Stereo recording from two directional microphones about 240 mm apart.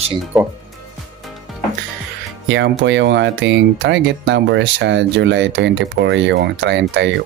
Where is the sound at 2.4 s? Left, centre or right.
Right.